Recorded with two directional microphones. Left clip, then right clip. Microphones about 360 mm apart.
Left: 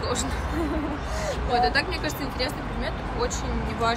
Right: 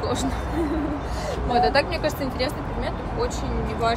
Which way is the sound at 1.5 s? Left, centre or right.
Centre.